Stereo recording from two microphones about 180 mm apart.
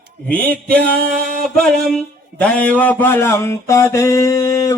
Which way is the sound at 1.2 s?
5° left (ahead or behind).